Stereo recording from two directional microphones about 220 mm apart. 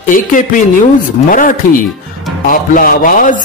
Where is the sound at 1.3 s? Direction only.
40° left (ahead or behind).